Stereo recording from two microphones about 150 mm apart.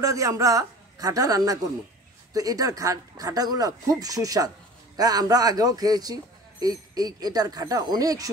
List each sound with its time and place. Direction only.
0.0 s speech: 20° right (ahead or behind)